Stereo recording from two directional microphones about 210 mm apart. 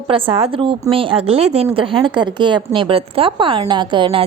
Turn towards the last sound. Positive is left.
turn(degrees=-25)  # may be behind; listen again after turning